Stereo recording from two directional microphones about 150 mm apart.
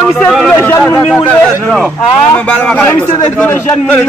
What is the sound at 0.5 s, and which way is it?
A man's voice, 15° left (ahead or behind).